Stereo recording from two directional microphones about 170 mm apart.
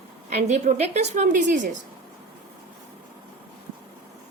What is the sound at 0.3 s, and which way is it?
A woman's voice, 45° right (ahead or behind).